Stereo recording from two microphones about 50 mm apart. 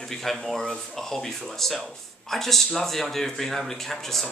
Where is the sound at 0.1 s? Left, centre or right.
Centre.